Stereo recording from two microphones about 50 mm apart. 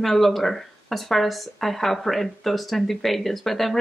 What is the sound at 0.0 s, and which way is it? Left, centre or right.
Speech, centre.